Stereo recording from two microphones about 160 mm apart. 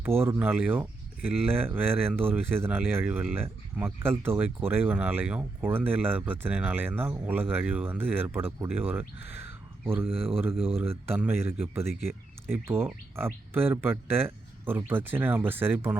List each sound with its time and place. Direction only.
0.2 s speech: 10° right (ahead or behind)
10.5 s speech: 35° right (ahead or behind)
11.1 s speech: 10° right (ahead or behind)